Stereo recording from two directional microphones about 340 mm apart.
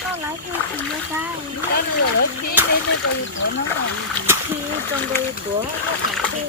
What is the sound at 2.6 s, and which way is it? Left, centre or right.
Splash, centre.